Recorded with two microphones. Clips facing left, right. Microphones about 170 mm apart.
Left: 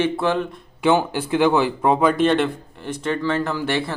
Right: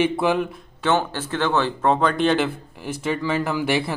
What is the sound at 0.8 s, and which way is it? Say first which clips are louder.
Speech: left 3 dB; 15° left (ahead or behind).